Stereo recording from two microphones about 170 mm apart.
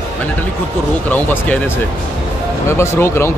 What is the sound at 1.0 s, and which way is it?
A man's voice, 10° left (ahead or behind).